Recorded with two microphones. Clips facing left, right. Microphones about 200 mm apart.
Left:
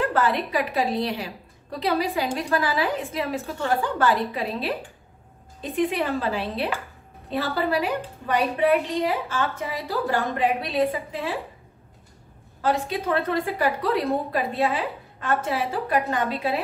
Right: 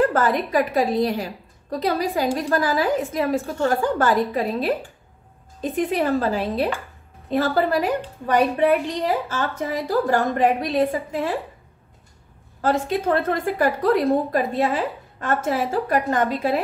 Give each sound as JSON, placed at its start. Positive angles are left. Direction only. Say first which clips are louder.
{"t": 0.0, "sound": "a woman's voice", "louder": "right 4 dB", "side_deg": -45}
{"t": 12.9, "sound": "a woman's voice", "louder": "right 3 dB", "side_deg": -50}